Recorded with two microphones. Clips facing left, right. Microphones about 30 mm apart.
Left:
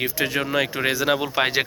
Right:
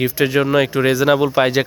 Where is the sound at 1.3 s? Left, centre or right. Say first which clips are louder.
Right 6 dB; centre.